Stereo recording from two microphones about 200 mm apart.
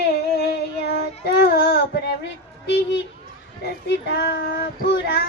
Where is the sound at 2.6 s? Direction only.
65° left (ahead or behind).